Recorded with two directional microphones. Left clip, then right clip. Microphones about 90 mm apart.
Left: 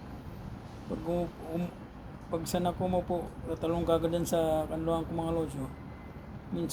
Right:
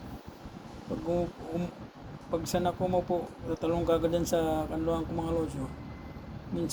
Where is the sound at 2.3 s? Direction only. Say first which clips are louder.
Right 2 dB; 40° left (ahead or behind).